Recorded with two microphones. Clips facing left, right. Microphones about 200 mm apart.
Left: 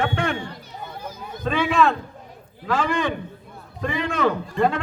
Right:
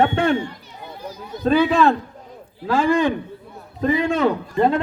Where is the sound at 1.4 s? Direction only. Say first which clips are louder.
Right 4 dB; 35° right (ahead or behind).